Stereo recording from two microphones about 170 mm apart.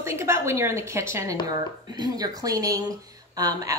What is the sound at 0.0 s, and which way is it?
A woman's voice, 15° right (ahead or behind).